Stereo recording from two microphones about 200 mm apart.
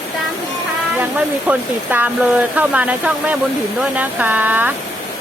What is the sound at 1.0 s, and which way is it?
Speech, 10° right (ahead or behind).